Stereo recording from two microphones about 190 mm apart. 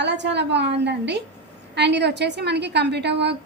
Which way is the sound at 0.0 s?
65° right (ahead or behind).